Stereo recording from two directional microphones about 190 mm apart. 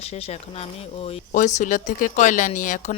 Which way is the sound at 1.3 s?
40° left (ahead or behind).